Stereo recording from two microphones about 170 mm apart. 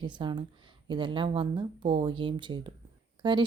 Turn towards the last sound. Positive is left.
turn(degrees=-30)  # may be behind; listen again after turning